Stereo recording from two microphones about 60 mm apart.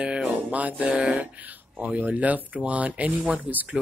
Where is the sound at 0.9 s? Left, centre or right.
Centre.